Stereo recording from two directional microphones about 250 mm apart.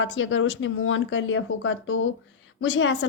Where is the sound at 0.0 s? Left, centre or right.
Left.